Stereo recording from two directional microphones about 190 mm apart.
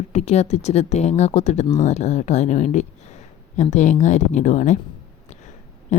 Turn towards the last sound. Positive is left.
turn(degrees=40)  # may be behind; listen again after turning